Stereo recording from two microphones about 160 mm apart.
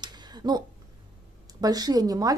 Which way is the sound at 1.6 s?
25° right (ahead or behind).